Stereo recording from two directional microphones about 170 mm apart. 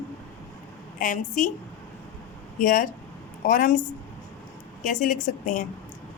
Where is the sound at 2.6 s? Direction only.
55° left (ahead or behind).